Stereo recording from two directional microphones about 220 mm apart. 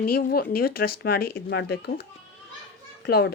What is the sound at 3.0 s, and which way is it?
Speech, 45° left (ahead or behind).